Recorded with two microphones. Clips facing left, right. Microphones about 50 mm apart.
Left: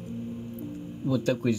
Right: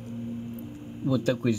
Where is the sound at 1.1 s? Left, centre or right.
Centre.